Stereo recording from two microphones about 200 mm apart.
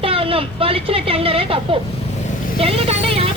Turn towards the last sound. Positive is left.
turn(degrees=-30)  # may be behind; listen again after turning